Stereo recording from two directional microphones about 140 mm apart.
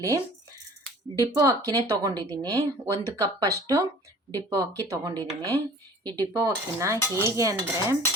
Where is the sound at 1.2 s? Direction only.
20° right (ahead or behind).